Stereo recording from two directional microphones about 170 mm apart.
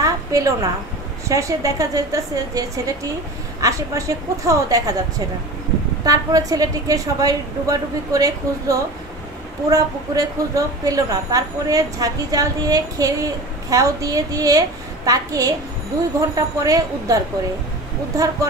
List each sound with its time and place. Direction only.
0.0 s a sound: 20° right (ahead or behind)
1.3 s a woman's voice: 20° right (ahead or behind)
6.0 s a woman's voice: 20° right (ahead or behind)